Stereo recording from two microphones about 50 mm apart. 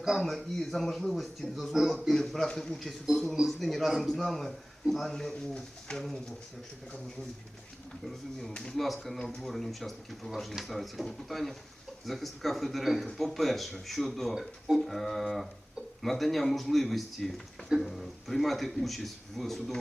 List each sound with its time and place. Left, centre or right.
0.2 s a man's voice: centre
2.5 s a man's voice: centre
3.1 s a man's voice: centre
8.0 s a man's voice: centre